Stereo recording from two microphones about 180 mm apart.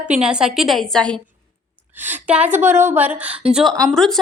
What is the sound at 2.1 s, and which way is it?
A woman's voice, 10° right (ahead or behind).